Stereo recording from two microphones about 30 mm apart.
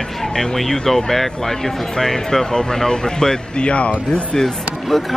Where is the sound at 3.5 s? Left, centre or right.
Left.